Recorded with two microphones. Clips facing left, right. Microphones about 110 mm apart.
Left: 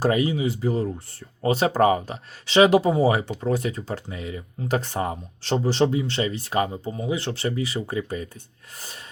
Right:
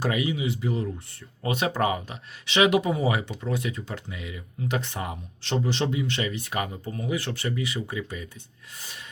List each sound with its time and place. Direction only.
0.0 s speech: 40° left (ahead or behind)